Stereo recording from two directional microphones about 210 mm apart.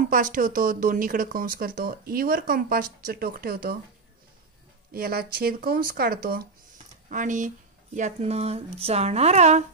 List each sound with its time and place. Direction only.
0.1 s speech: 40° right (ahead or behind)
4.9 s speech: 45° right (ahead or behind)